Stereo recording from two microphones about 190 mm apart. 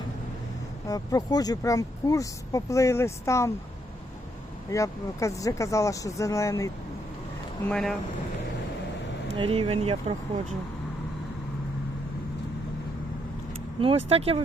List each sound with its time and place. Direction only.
0.9 s speech: 20° left (ahead or behind)
4.7 s speech: 15° left (ahead or behind)
7.7 s speech: 5° left (ahead or behind)
9.4 s speech: 30° right (ahead or behind)
13.8 s speech: 30° right (ahead or behind)